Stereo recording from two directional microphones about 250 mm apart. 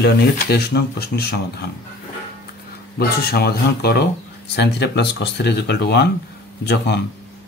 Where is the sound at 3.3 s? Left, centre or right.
Left.